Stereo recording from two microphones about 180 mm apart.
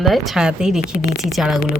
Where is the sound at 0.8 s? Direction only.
55° left (ahead or behind).